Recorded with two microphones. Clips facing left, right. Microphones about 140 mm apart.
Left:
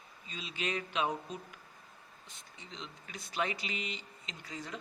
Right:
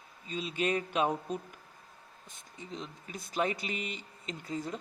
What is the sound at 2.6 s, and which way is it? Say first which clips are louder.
A man's voice: right 6 dB; 45° right (ahead or behind).